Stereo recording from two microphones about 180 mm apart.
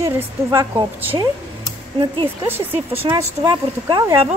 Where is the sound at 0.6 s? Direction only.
25° right (ahead or behind).